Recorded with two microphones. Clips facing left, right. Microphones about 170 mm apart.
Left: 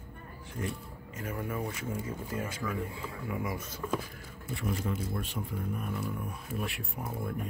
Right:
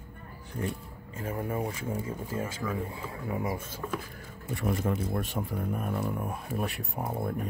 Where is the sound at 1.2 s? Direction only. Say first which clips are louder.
Right 3 dB; 30° right (ahead or behind).